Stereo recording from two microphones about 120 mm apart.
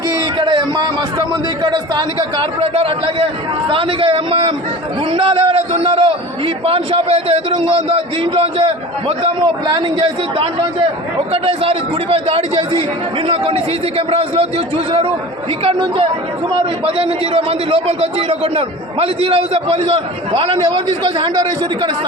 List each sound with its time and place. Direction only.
0.3 s a man's voice: 40° right (ahead or behind)
15.6 s a man's voice: 50° right (ahead or behind)